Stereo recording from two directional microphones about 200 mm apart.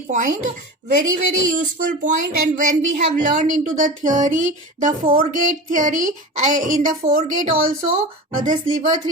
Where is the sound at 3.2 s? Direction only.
40° right (ahead or behind).